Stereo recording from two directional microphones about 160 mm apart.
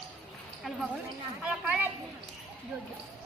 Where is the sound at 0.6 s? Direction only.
Centre (ahead or behind).